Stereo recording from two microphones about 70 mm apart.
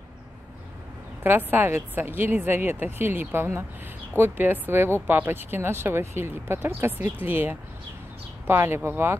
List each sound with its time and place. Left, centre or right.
1.2 s speech: right